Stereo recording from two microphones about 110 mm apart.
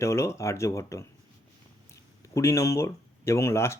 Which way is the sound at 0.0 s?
25° left (ahead or behind).